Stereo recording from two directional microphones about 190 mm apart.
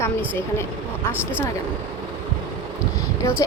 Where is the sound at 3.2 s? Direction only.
15° left (ahead or behind).